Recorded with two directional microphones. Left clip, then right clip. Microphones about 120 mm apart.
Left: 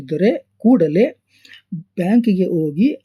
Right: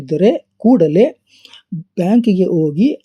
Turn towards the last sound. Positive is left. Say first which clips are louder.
# right 3 dB
turn(degrees=-25)  # may be behind; listen again after turning